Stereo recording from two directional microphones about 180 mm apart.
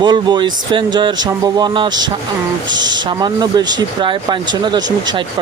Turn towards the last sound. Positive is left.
turn(degrees=-25)  # may be behind; listen again after turning